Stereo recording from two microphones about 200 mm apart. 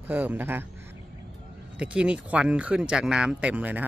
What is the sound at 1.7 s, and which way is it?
Speech, 5° right (ahead or behind).